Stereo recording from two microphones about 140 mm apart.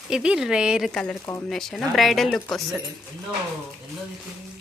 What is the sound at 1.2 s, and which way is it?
Speech, 20° left (ahead or behind).